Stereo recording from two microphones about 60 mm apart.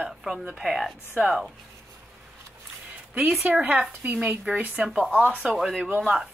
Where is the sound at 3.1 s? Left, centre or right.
Right.